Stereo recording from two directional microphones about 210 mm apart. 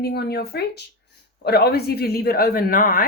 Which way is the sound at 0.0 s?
50° left (ahead or behind).